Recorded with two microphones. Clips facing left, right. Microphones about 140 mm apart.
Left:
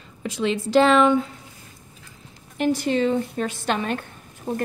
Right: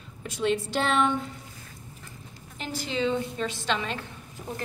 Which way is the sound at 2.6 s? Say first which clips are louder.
Left 9 dB; 50° left (ahead or behind).